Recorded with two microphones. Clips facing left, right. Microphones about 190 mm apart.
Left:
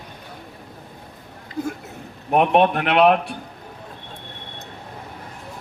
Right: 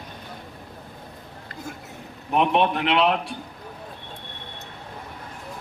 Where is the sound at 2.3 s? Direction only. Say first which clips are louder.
Left 4 dB; 55° left (ahead or behind).